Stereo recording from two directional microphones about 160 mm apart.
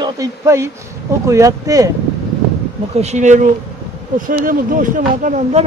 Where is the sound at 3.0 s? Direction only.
45° right (ahead or behind).